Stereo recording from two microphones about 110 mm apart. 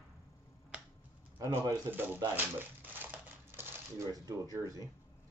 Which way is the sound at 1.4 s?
25° right (ahead or behind).